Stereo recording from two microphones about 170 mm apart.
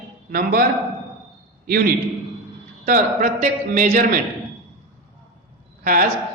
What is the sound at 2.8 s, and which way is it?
A man's voice, 50° right (ahead or behind).